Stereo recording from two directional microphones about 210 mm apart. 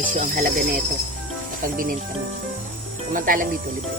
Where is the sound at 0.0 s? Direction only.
40° right (ahead or behind).